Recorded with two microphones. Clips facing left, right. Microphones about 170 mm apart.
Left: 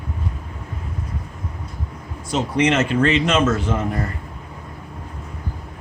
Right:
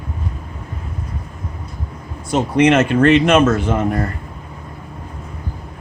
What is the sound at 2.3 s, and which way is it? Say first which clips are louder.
A man's voice: right 5 dB; 55° right (ahead or behind).